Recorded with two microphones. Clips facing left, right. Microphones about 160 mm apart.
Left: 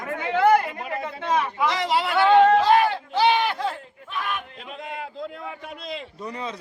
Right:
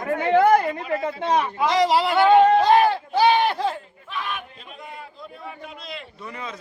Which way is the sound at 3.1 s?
35° right (ahead or behind).